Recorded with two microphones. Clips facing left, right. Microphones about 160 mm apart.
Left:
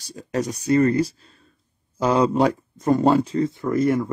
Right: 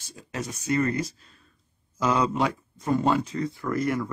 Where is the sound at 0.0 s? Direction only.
40° left (ahead or behind).